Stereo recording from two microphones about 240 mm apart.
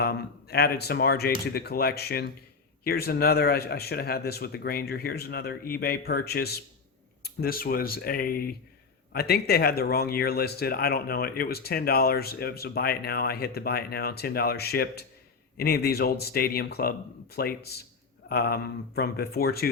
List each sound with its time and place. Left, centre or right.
0.0 s speech: left